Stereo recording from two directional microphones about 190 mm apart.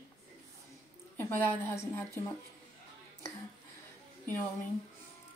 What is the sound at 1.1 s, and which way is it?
Speech, 10° left (ahead or behind).